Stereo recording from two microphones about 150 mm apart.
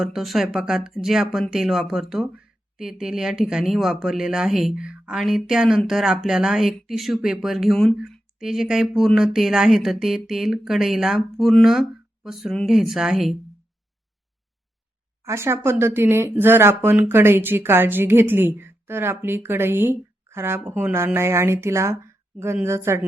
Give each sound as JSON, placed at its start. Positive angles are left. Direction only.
{"t": 0.0, "sound": "speech", "side_deg": 0}
{"t": 15.2, "sound": "speech", "side_deg": -20}